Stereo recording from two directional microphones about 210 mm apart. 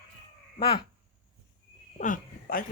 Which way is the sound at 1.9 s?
40° left (ahead or behind).